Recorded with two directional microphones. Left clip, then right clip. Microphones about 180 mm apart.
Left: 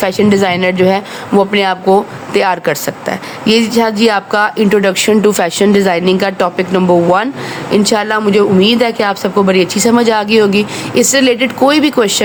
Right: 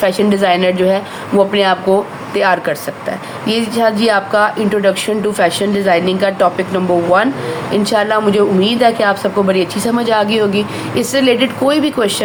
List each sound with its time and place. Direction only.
0.0 s speech: 45° left (ahead or behind)